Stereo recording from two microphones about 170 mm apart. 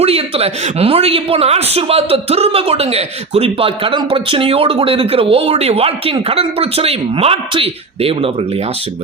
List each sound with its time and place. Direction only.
0.0 s a man's voice: 35° right (ahead or behind)